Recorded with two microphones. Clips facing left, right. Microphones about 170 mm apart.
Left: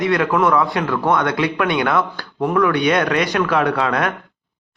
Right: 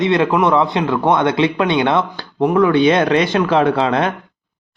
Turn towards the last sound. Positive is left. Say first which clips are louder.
# right 3 dB
turn(degrees=-25)  # may be behind; listen again after turning